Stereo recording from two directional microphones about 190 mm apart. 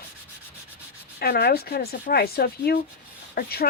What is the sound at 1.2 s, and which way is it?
Speech, 55° left (ahead or behind).